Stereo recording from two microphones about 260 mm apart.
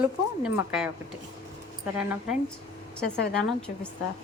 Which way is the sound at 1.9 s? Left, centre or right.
Centre.